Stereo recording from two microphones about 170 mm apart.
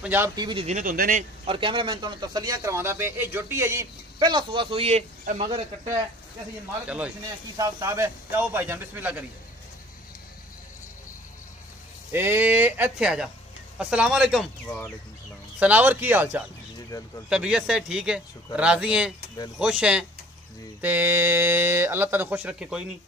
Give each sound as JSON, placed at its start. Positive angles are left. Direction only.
{"t": 0.0, "sound": "speech", "side_deg": -10}
{"t": 0.4, "sound": "speech", "side_deg": -25}
{"t": 0.7, "sound": "speech", "side_deg": -50}
{"t": 1.4, "sound": "speech", "side_deg": -30}
{"t": 5.2, "sound": "speech", "side_deg": -50}
{"t": 6.9, "sound": "speech", "side_deg": -5}
{"t": 7.5, "sound": "speech", "side_deg": -20}
{"t": 12.1, "sound": "speech", "side_deg": -15}